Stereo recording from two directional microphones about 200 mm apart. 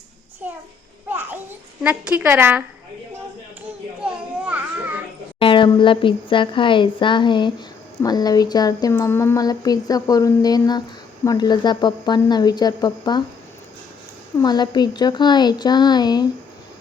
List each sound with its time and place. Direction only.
1.0 s a child's voice: 10° right (ahead or behind)
4.4 s music: 10° right (ahead or behind)
5.4 s speech: 25° left (ahead or behind)
14.4 s speech: 20° left (ahead or behind)